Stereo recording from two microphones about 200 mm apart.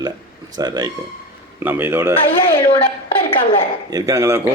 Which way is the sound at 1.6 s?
10° right (ahead or behind).